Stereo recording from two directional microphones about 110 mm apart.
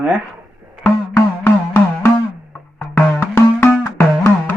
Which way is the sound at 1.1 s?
25° left (ahead or behind).